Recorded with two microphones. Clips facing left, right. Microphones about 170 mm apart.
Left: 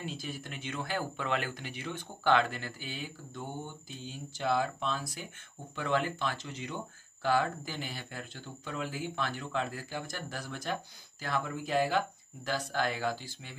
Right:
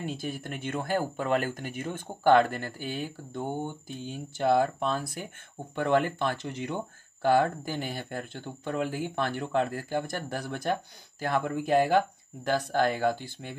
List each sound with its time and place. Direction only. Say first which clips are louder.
0.0 s speech: right 6 dB; 55° right (ahead or behind)